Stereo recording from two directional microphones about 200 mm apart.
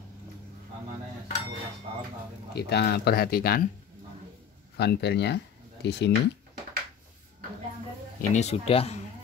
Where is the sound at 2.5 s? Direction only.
55° left (ahead or behind).